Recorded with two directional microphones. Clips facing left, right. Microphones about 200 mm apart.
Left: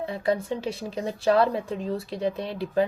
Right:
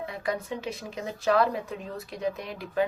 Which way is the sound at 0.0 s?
30° left (ahead or behind).